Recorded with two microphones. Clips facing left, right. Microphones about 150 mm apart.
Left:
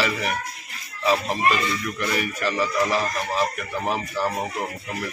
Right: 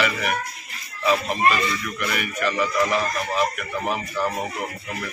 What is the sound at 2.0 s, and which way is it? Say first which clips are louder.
A man's voice: even; 30° left (ahead or behind).